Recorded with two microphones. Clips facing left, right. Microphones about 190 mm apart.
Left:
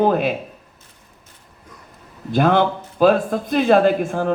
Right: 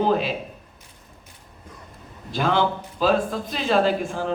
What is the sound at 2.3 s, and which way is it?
Speech, 55° left (ahead or behind).